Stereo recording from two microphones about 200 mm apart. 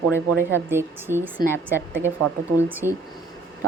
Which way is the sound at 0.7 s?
10° right (ahead or behind).